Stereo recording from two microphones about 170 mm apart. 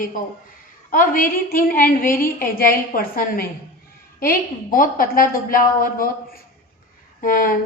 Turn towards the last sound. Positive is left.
turn(degrees=55)  # may be behind; listen again after turning